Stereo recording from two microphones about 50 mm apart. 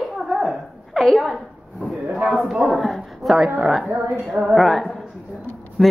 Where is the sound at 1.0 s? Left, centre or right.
Centre.